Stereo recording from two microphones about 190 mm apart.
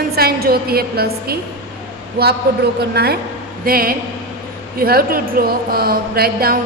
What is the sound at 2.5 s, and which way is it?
A woman's voice, 65° right (ahead or behind).